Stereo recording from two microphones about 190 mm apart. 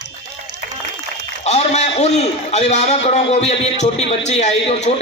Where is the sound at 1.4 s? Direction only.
35° left (ahead or behind).